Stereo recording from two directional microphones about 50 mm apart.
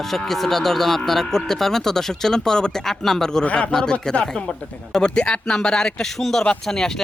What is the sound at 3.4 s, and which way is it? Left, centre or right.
A man's voice, left.